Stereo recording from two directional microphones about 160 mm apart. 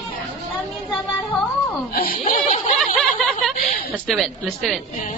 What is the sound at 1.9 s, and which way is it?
Speech, 65° left (ahead or behind).